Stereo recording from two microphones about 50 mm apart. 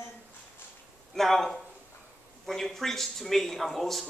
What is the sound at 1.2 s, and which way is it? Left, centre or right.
A man's voice, centre.